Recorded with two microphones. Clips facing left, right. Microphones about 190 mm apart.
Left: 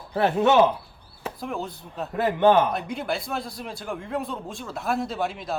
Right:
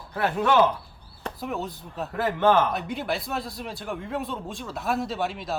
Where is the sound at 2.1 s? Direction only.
15° left (ahead or behind).